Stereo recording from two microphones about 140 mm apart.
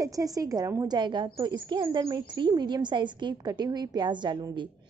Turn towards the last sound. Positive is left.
turn(degrees=-35)  # may be behind; listen again after turning